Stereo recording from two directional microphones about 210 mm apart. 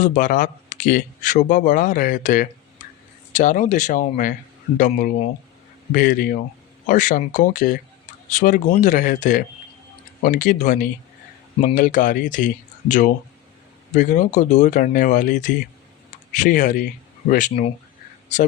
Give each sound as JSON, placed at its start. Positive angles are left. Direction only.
{"t": 0.0, "sound": "speech", "side_deg": 40}